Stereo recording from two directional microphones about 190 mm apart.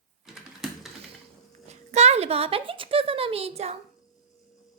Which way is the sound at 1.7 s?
35° right (ahead or behind).